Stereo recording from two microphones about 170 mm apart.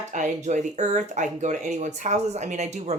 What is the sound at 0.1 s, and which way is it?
Speech, 45° right (ahead or behind).